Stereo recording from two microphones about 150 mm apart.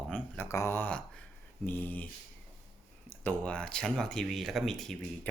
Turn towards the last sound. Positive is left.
turn(degrees=0)  # may be behind; listen again after turning